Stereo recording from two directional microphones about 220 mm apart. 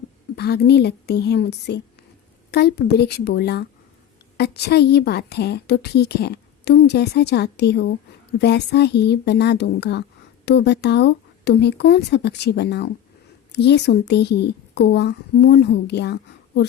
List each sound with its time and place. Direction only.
0.3 s a woman's voice: 45° left (ahead or behind)